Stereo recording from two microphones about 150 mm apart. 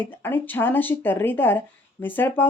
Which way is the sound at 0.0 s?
15° left (ahead or behind).